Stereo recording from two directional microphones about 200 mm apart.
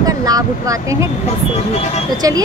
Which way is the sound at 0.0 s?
20° right (ahead or behind).